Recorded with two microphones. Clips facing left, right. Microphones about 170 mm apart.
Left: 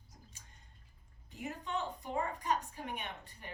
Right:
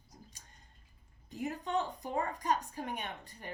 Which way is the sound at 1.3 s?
40° right (ahead or behind).